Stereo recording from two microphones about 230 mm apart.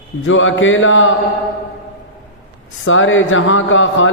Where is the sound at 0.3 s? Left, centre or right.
Left.